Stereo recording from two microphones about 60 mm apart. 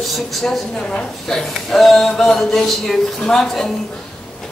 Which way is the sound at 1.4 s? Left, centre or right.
Centre.